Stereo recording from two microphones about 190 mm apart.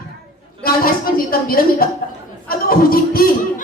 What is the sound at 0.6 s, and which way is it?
A woman's voice, 50° left (ahead or behind).